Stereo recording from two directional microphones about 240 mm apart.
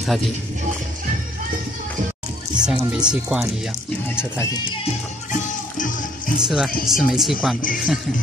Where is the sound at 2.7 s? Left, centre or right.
Centre.